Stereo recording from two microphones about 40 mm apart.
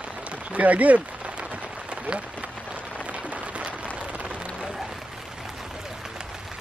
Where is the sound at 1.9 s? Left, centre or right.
Right.